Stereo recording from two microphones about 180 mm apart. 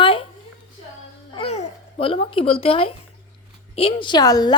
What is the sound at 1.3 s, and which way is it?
A child's voice, 35° left (ahead or behind).